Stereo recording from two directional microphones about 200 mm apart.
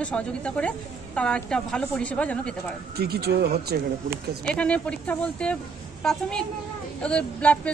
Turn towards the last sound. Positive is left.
turn(degrees=5)  # may be behind; listen again after turning